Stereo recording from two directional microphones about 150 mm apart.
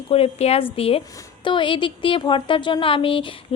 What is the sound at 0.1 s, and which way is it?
A woman's voice, 40° left (ahead or behind).